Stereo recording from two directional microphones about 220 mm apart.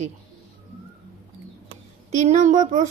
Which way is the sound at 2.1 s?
30° right (ahead or behind).